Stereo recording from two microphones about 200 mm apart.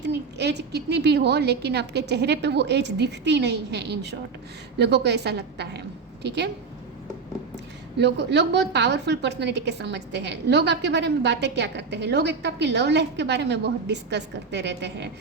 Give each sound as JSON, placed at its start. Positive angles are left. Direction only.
{"t": 0.0, "sound": "a woman's voice", "side_deg": -60}
{"t": 7.9, "sound": "a woman's voice", "side_deg": -55}